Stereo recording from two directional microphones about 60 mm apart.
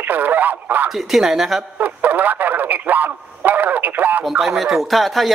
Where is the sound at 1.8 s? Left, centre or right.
Right.